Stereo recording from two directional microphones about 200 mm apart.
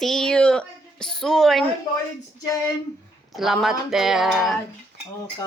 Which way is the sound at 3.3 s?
Centre (ahead or behind).